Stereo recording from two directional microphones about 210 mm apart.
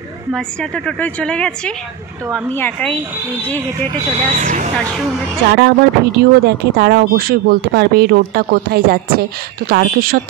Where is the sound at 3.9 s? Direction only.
30° right (ahead or behind).